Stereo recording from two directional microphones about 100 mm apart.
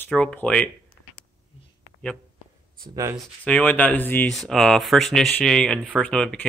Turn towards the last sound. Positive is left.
turn(degrees=10)  # may be behind; listen again after turning